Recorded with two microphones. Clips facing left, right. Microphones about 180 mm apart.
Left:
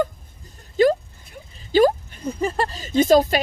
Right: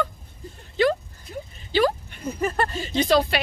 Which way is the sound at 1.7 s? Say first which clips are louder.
Left 5 dB; 45° left (ahead or behind).